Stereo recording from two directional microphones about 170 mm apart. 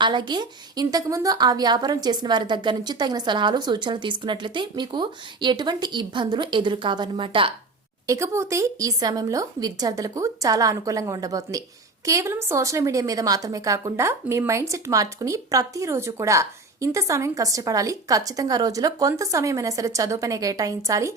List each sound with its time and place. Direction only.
0.0 s a woman's voice: 25° right (ahead or behind)
8.0 s a woman's voice: 15° right (ahead or behind)